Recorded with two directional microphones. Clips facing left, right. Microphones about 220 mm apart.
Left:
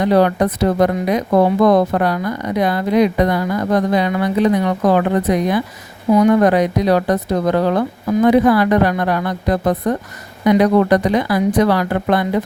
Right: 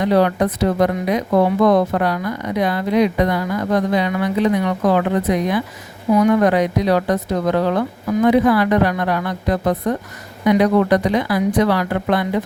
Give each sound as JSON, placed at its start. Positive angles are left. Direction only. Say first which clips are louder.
{"t": 0.0, "sound": "a woman's voice", "louder": "left 2 dB", "side_deg": 40}